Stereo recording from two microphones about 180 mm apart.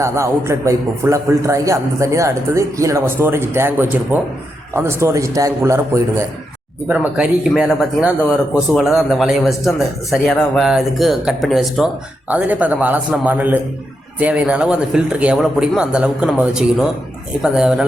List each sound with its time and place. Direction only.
0.0 s a man's voice: 15° right (ahead or behind)